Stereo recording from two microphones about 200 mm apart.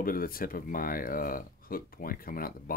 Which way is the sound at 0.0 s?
45° left (ahead or behind).